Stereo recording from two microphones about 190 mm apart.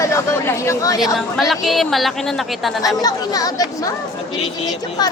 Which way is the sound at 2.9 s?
20° left (ahead or behind).